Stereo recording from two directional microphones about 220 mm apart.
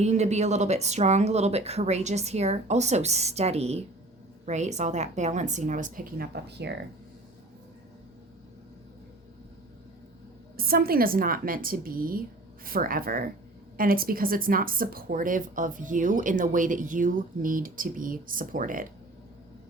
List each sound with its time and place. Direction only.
0.0 s speech: 30° right (ahead or behind); by 6.7 s 50° right (ahead or behind)
10.6 s speech: 45° right (ahead or behind)